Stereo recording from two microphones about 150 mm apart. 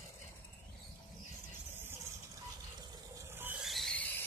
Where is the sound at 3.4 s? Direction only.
5° right (ahead or behind).